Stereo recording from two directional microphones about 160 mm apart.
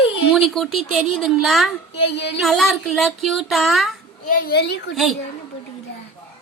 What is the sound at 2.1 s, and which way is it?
Speech, 90° left.